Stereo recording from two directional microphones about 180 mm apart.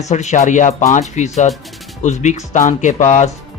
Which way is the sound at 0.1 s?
40° left (ahead or behind).